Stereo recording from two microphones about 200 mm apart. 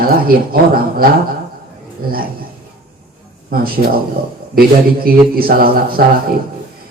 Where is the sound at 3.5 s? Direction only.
50° right (ahead or behind).